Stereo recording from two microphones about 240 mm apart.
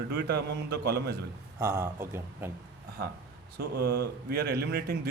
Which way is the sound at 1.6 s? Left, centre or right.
Centre.